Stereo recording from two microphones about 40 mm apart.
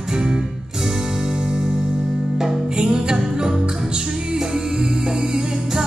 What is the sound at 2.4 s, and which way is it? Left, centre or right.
Music, centre.